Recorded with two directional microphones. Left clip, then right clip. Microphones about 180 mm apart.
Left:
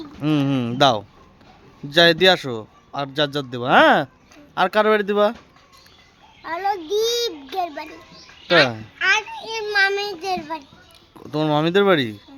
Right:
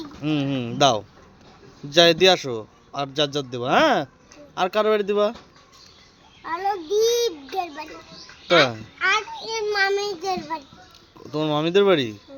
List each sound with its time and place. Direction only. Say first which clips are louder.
0.2 s speech: left 4 dB; 35° left (ahead or behind)
1.9 s a man's voice: left 1 dB; 25° left (ahead or behind)
6.4 s a child's voice: left 2 dB; 10° left (ahead or behind)
9.6 s child singing: left 3 dB; 10° left (ahead or behind)
11.2 s a man's voice: left 3 dB; 30° left (ahead or behind)